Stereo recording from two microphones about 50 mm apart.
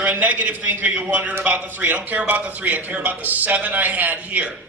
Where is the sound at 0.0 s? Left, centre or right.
Right.